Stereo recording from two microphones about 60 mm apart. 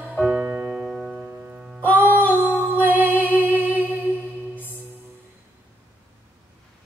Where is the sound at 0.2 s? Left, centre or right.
Right.